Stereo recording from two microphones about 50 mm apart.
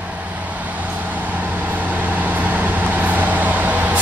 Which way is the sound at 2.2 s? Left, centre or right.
Right.